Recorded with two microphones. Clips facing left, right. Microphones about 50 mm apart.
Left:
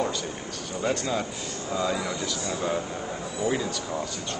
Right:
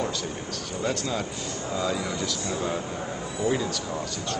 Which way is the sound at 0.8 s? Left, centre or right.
Centre.